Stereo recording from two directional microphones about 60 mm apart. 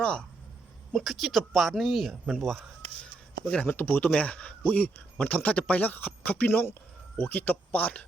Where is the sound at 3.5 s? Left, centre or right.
Left.